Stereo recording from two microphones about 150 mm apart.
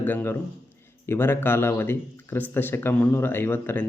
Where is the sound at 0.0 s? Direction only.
15° left (ahead or behind).